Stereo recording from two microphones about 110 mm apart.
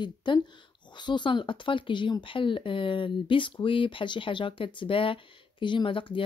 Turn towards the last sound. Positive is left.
turn(degrees=50)  # may be behind; listen again after turning